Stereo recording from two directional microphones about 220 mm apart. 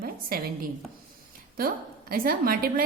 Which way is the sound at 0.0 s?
40° right (ahead or behind).